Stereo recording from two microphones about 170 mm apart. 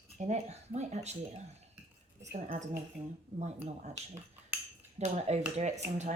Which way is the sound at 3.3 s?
35° right (ahead or behind).